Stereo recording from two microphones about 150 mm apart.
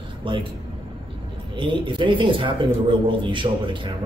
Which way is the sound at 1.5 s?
35° right (ahead or behind).